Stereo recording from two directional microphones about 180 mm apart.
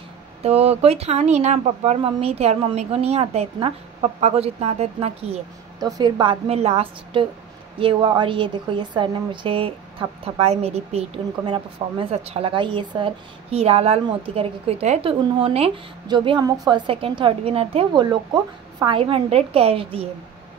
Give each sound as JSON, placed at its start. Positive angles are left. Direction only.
{"t": 0.4, "sound": "speech", "side_deg": -35}
{"t": 5.8, "sound": "a woman's voice", "side_deg": -20}